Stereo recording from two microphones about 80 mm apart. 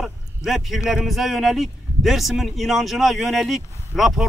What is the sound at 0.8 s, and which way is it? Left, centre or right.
A man's voice, centre.